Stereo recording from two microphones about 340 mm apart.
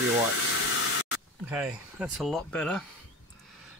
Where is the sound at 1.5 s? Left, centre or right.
Centre.